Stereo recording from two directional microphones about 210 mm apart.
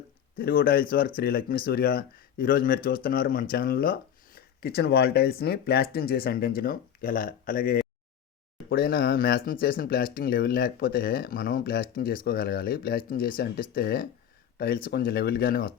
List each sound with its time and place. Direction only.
0.3 s speech: 45° left (ahead or behind)